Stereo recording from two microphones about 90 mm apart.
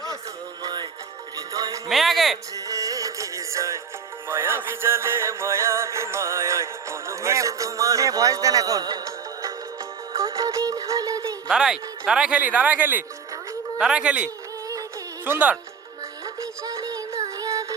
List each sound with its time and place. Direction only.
0.6 s music: 50° right (ahead or behind)
1.4 s music: 40° right (ahead or behind)
1.9 s speech: centre (ahead or behind)
2.6 s music: 40° right (ahead or behind)
11.5 s speech: 5° right (ahead or behind)
16.2 s synthetic singing: 40° right (ahead or behind)